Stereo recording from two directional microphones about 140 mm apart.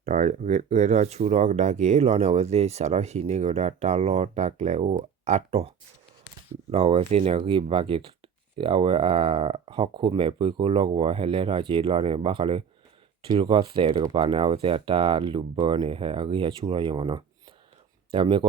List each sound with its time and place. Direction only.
0.0 s speech: 55° right (ahead or behind)
6.7 s speech: 45° right (ahead or behind)